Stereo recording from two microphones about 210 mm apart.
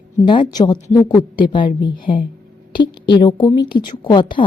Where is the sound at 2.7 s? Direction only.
20° left (ahead or behind).